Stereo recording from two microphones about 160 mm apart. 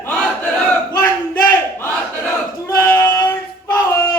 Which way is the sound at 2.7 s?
20° left (ahead or behind).